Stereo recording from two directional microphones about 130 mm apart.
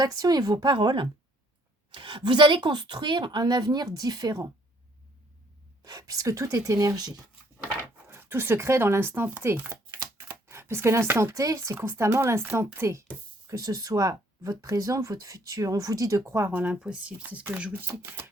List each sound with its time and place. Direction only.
0.0 s speech: 30° right (ahead or behind)
5.8 s speech: 30° right (ahead or behind)
8.1 s speech: 15° right (ahead or behind)